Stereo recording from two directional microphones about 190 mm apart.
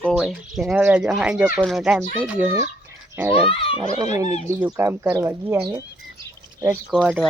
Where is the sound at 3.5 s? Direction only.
30° left (ahead or behind).